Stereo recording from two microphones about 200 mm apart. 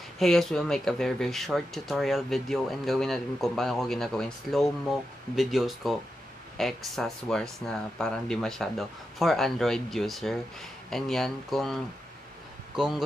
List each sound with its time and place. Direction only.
0.2 s a man's voice: centre (ahead or behind)